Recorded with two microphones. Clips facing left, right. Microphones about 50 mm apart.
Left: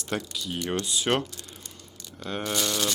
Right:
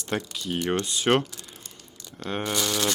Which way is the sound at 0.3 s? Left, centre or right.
Right.